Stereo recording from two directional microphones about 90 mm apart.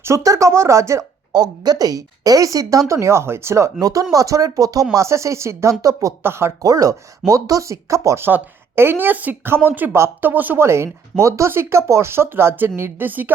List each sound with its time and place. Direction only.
0.0 s speech: 35° right (ahead or behind)
1.3 s speech: 50° right (ahead or behind); by 13.3 s 20° right (ahead or behind)